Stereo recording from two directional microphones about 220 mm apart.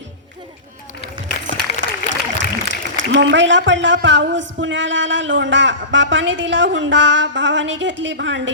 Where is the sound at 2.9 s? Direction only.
55° right (ahead or behind).